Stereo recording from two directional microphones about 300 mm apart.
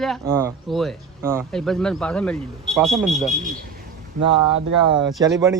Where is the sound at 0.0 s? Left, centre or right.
Centre.